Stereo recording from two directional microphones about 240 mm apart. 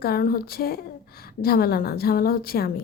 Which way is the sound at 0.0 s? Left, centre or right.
Left.